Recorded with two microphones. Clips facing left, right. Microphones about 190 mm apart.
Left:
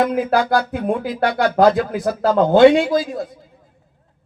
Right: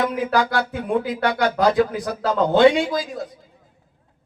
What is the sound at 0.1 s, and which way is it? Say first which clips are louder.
Speech: left 4 dB; 50° left (ahead or behind).